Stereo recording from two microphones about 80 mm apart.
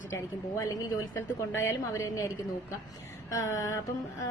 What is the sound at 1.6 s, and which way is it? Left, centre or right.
A woman's voice, left.